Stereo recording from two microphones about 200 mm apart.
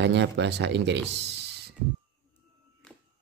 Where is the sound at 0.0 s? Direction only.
60° right (ahead or behind).